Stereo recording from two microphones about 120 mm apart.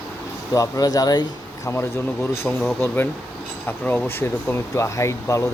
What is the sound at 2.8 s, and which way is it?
Speech, 20° left (ahead or behind).